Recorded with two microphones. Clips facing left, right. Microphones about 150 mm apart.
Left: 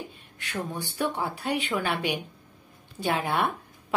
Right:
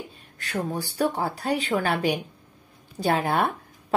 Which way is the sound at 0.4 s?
40° right (ahead or behind).